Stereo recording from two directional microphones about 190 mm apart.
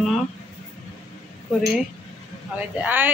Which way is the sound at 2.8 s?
10° right (ahead or behind).